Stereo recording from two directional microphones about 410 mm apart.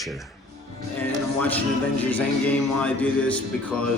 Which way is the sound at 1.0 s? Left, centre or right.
Centre.